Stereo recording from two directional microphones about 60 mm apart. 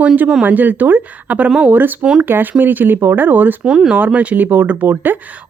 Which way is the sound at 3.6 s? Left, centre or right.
Centre.